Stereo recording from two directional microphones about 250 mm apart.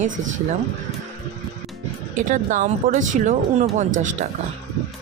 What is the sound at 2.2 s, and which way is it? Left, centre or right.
Speech, right.